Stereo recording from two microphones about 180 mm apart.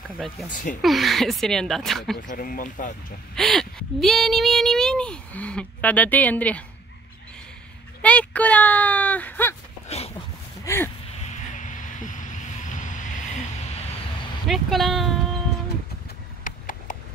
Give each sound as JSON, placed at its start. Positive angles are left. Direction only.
{"t": 0.8, "sound": "a woman's voice", "side_deg": 0}
{"t": 2.2, "sound": "speech", "side_deg": 50}
{"t": 3.3, "sound": "a woman's voice", "side_deg": 0}
{"t": 8.0, "sound": "speech", "side_deg": 5}
{"t": 9.8, "sound": "a sound", "side_deg": 35}
{"t": 10.6, "sound": "a sound", "side_deg": 15}
{"t": 11.2, "sound": "music", "side_deg": 45}
{"t": 12.6, "sound": "vehicle", "side_deg": 45}
{"t": 14.5, "sound": "a woman's voice", "side_deg": 0}
{"t": 16.4, "sound": "a sound", "side_deg": 50}